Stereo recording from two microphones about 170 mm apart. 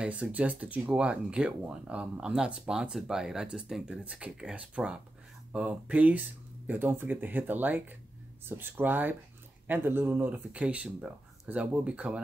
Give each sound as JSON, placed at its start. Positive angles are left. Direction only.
{"t": 0.0, "sound": "speech", "side_deg": -5}